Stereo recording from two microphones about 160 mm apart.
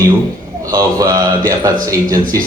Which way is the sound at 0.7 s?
20° right (ahead or behind).